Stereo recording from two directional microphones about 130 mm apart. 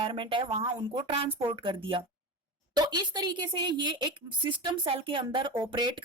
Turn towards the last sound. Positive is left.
turn(degrees=-40)  # may be behind; listen again after turning